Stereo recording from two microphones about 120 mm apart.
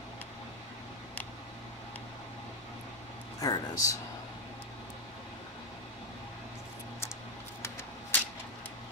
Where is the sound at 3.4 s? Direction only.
30° left (ahead or behind).